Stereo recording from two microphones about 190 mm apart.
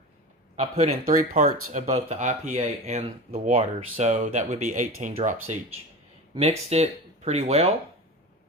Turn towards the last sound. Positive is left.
turn(degrees=-35)  # may be behind; listen again after turning